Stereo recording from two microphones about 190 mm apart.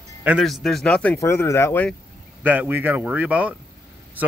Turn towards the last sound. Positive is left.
turn(degrees=-5)  # may be behind; listen again after turning